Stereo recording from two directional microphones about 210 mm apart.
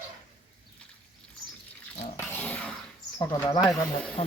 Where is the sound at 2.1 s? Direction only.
10° left (ahead or behind).